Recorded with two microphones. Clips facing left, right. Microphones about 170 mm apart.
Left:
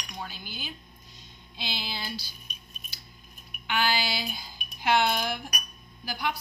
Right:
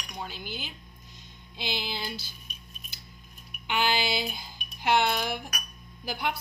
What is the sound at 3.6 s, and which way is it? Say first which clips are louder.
Speech: right 1 dB; 20° right (ahead or behind).